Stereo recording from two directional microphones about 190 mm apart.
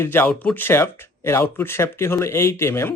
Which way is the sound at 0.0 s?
10° left (ahead or behind).